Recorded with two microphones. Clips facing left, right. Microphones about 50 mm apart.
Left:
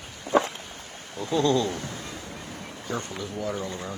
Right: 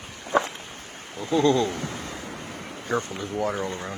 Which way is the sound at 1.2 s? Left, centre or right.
Centre.